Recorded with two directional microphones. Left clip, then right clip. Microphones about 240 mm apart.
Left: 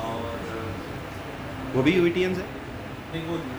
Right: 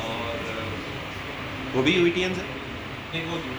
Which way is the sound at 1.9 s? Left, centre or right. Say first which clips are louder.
Even; left.